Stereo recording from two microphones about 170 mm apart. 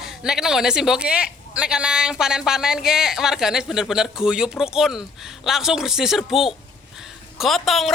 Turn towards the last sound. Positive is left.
turn(degrees=0)  # may be behind; listen again after turning